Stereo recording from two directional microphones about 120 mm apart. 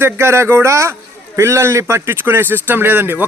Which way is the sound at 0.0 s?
20° right (ahead or behind).